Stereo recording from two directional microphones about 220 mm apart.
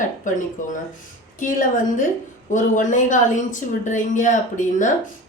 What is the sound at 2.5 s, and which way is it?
A woman's voice, 35° left (ahead or behind).